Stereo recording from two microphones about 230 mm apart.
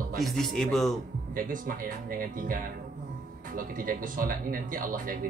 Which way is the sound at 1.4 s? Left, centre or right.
Right.